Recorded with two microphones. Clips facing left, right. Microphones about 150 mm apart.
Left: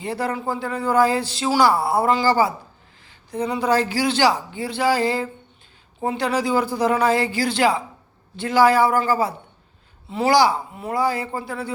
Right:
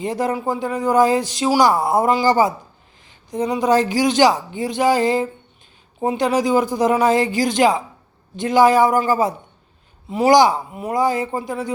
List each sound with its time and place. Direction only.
0.0 s speech: 20° right (ahead or behind)